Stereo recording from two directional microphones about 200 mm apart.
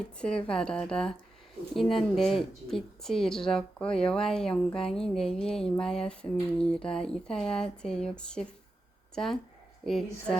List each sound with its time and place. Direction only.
0.0 s a woman's voice: 5° left (ahead or behind)